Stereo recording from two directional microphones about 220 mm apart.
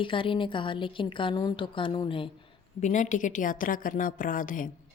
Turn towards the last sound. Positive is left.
turn(degrees=40)  # may be behind; listen again after turning